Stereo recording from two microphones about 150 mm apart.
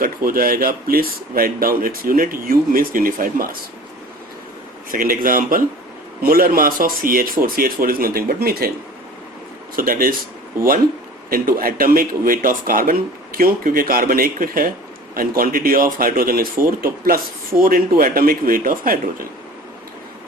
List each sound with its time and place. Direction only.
0.0 s speech: 75° right (ahead or behind)
4.9 s speech: 70° right (ahead or behind); by 8.7 s 85° right
9.7 s speech: 70° right (ahead or behind)
11.3 s speech: 75° right (ahead or behind)